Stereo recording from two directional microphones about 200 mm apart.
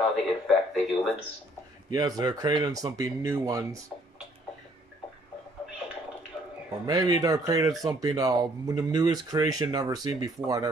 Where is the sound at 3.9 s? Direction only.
30° left (ahead or behind).